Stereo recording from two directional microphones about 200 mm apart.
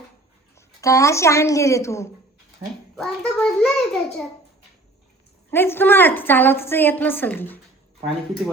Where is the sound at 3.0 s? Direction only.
5° left (ahead or behind).